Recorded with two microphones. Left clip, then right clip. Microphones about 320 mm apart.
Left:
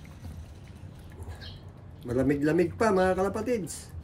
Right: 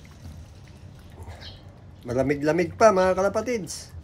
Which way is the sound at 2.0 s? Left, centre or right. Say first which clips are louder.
Right 3 dB; right.